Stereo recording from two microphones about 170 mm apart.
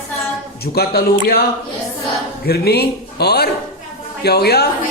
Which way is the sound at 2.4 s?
70° left (ahead or behind).